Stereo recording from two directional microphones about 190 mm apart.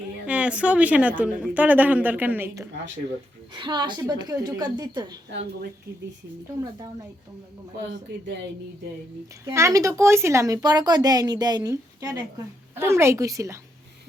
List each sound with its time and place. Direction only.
0.3 s a woman's voice: 5° right (ahead or behind)
3.5 s a woman's voice: 25° right (ahead or behind)
6.6 s a woman's voice: 20° right (ahead or behind)
9.4 s a woman's voice: 15° right (ahead or behind)